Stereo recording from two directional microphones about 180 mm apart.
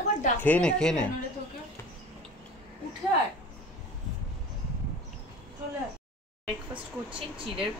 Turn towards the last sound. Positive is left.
turn(degrees=-30)  # may be behind; listen again after turning